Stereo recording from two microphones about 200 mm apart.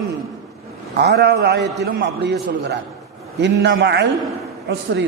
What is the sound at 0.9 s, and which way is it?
A man's voice, 55° right (ahead or behind).